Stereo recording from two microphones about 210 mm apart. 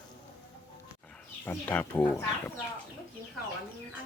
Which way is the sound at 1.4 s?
10° left (ahead or behind).